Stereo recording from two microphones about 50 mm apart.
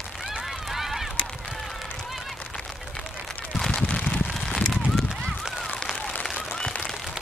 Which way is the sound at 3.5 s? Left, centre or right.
Centre.